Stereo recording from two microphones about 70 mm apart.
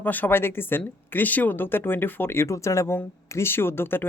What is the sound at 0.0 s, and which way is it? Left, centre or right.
Speech, left.